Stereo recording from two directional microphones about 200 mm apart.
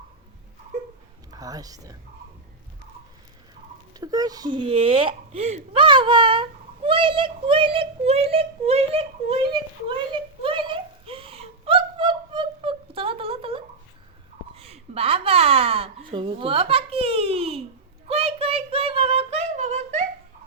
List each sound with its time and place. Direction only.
1.3 s speech: 20° right (ahead or behind)
3.9 s a sound: 20° right (ahead or behind)
18.1 s child singing: 30° right (ahead or behind)